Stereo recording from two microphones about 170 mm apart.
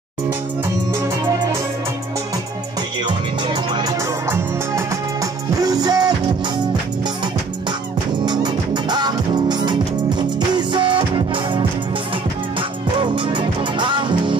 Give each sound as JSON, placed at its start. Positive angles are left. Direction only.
{"t": 5.6, "sound": "music", "side_deg": -20}
{"t": 8.3, "sound": "music", "side_deg": -25}
{"t": 12.9, "sound": "music", "side_deg": -30}